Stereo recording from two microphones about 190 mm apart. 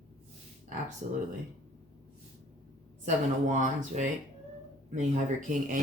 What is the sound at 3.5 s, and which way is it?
Speech, 40° right (ahead or behind).